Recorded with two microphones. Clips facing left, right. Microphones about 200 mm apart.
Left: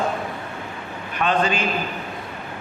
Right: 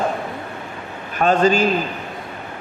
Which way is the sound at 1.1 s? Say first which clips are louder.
Right 6 dB; 45° right (ahead or behind).